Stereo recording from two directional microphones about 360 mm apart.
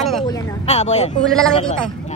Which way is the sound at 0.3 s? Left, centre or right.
Centre.